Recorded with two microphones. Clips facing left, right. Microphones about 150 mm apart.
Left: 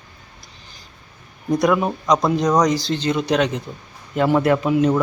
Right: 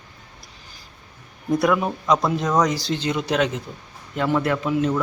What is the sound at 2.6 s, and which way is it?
Speech, 10° right (ahead or behind).